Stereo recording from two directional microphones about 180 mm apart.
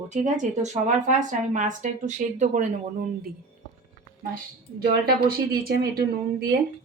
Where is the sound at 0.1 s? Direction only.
40° right (ahead or behind).